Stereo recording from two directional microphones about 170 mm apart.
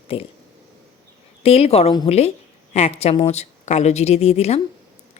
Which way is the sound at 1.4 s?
35° left (ahead or behind).